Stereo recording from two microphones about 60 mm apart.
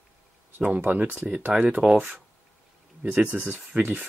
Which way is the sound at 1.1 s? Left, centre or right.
Centre.